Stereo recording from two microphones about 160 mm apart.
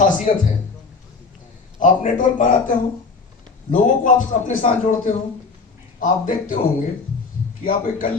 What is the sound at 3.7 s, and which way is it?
Speech, 55° left (ahead or behind).